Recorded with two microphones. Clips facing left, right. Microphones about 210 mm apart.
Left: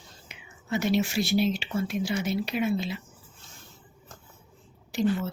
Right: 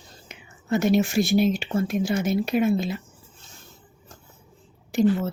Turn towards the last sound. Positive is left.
turn(degrees=-50)  # may be behind; listen again after turning